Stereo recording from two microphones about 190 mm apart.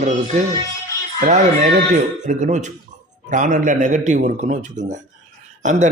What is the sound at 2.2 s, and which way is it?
A man's voice, 40° right (ahead or behind).